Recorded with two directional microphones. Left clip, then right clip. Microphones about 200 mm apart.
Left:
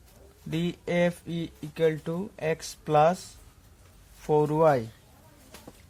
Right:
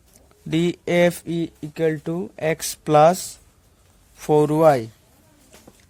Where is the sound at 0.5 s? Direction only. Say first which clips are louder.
Right 9 dB; 60° right (ahead or behind).